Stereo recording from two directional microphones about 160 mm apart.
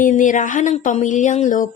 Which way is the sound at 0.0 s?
55° left (ahead or behind).